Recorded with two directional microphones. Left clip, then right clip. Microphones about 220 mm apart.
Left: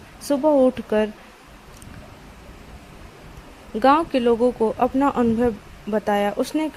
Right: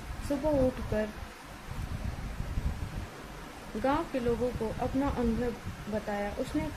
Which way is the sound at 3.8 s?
45° left (ahead or behind).